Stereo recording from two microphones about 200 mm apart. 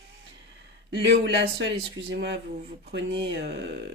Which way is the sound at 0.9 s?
60° right (ahead or behind).